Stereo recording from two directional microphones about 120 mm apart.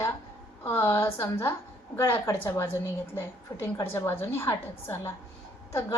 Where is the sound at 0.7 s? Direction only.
20° left (ahead or behind).